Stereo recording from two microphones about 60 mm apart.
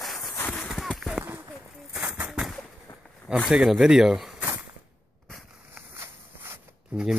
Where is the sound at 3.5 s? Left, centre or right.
Centre.